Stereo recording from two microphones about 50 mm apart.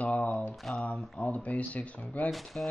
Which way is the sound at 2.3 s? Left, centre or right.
Centre.